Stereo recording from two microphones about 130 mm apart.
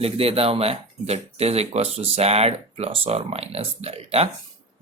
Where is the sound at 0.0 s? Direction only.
50° right (ahead or behind).